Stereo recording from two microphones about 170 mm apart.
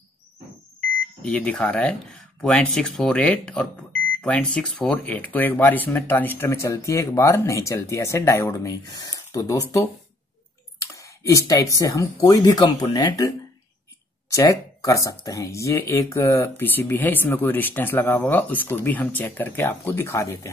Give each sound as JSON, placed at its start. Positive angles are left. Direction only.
{"t": 1.2, "sound": "speech", "side_deg": 5}
{"t": 10.9, "sound": "speech", "side_deg": 20}
{"t": 14.3, "sound": "speech", "side_deg": 20}